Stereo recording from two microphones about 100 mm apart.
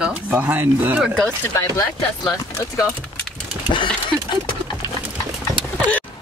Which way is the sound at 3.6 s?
55° left (ahead or behind).